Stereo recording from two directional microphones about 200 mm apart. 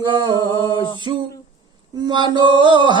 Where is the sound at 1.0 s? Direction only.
20° right (ahead or behind).